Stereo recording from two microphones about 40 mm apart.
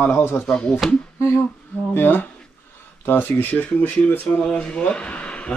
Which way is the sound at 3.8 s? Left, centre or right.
Left.